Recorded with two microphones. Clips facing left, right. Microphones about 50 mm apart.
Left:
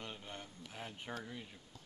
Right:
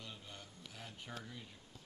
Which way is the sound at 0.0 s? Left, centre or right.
Left.